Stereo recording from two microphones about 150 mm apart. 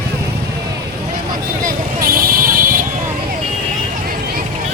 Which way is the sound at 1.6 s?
70° right (ahead or behind).